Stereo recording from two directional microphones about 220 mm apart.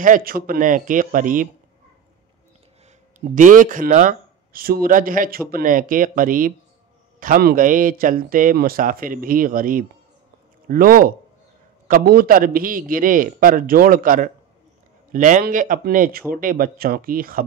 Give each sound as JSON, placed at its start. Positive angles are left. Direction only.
{"t": 0.0, "sound": "speech", "side_deg": -40}
{"t": 3.3, "sound": "speech", "side_deg": -35}